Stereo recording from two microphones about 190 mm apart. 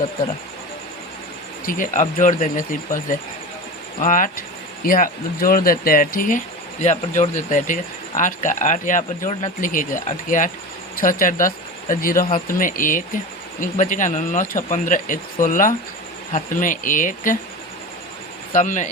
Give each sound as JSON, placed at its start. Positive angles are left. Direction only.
{"t": 1.6, "sound": "speech", "side_deg": 45}
{"t": 18.5, "sound": "speech", "side_deg": 40}